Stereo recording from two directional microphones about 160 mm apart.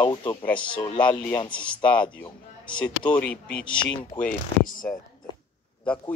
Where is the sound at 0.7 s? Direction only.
10° left (ahead or behind).